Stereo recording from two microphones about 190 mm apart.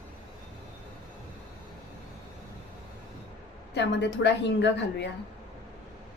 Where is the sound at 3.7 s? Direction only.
65° left (ahead or behind).